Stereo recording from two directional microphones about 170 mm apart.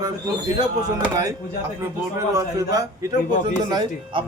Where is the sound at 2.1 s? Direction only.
20° right (ahead or behind).